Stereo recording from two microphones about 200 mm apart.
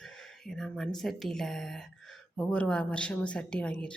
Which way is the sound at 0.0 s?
Centre (ahead or behind).